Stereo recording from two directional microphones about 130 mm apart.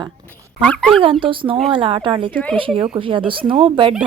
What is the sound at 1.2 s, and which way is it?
Speech, 40° right (ahead or behind).